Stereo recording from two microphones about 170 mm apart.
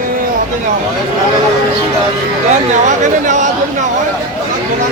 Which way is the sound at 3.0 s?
45° right (ahead or behind).